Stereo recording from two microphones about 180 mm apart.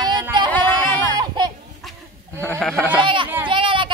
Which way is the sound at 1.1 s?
20° right (ahead or behind).